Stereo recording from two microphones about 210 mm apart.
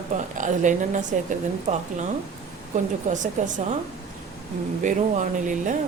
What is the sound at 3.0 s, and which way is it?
Speech, 35° right (ahead or behind).